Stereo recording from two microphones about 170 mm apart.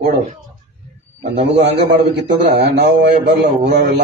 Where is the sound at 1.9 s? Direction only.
85° right.